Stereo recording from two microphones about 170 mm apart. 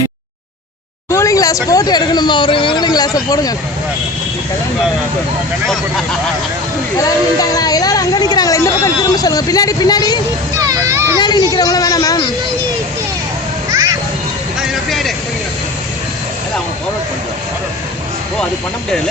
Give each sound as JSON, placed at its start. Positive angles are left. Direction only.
{"t": 1.1, "sound": "speech", "side_deg": 20}
{"t": 7.3, "sound": "speech", "side_deg": 20}
{"t": 10.6, "sound": "a sound", "side_deg": -20}
{"t": 11.2, "sound": "speech", "side_deg": 25}
{"t": 14.6, "sound": "vehicle", "side_deg": 0}